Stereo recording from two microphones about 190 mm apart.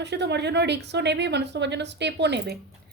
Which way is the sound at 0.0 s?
65° right (ahead or behind).